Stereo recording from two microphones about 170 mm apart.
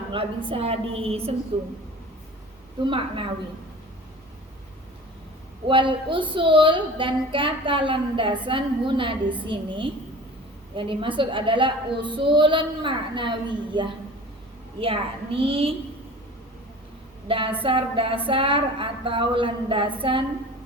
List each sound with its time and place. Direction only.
0.1 s speech: 30° right (ahead or behind)
2.8 s speech: 30° right (ahead or behind)
5.6 s child singing: 30° right (ahead or behind)
14.8 s speech: 30° right (ahead or behind)
17.2 s speech: 30° right (ahead or behind)